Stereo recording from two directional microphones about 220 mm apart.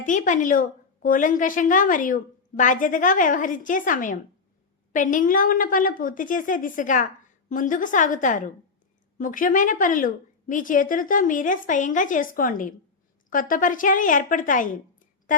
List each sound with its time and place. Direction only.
0.0 s a woman's voice: 35° left (ahead or behind)